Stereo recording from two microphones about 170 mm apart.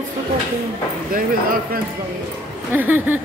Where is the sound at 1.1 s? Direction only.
55° right (ahead or behind).